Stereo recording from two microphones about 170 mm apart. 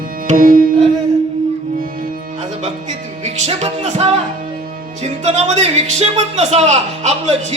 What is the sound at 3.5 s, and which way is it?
Music, 40° right (ahead or behind).